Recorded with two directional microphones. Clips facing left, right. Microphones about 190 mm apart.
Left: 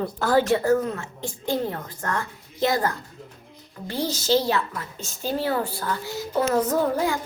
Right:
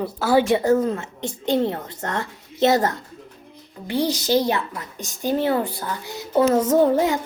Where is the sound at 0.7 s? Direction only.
30° right (ahead or behind).